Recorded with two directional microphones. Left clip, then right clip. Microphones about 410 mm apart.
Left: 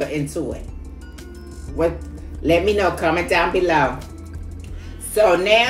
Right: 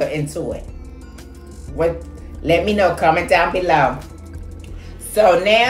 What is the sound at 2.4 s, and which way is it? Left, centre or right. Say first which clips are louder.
A woman's voice: right 2 dB; centre.